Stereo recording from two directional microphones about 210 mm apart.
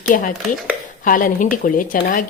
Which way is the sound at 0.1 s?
40° left (ahead or behind).